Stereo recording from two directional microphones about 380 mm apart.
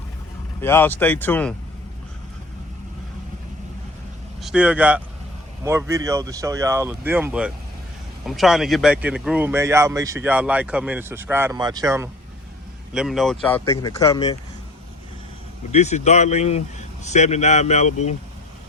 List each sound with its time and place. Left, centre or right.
0.6 s speech: centre
4.4 s speech: centre
15.7 s speech: centre